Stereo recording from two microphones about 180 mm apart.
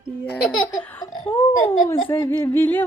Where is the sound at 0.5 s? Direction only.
25° left (ahead or behind).